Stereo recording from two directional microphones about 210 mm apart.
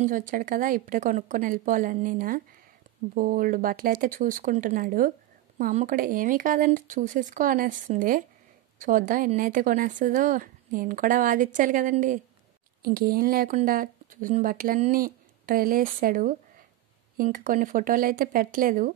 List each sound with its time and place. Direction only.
0.0 s speech: 40° right (ahead or behind)